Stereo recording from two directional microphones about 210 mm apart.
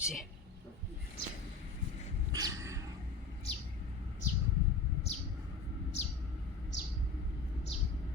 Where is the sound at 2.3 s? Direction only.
15° right (ahead or behind).